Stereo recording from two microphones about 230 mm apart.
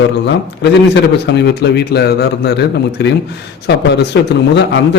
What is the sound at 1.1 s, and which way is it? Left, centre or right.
A man's voice, left.